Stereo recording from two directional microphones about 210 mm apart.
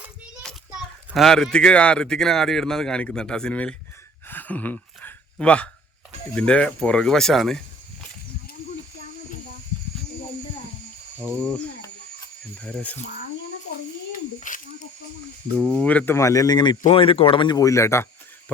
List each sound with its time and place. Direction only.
0.4 s a child's voice: centre (ahead or behind)
4.3 s a sound: 10° left (ahead or behind)
6.3 s speech: 5° left (ahead or behind)
12.6 s speech: 5° left (ahead or behind)
14.3 s a sound: 40° left (ahead or behind)
15.5 s speech: 5° left (ahead or behind)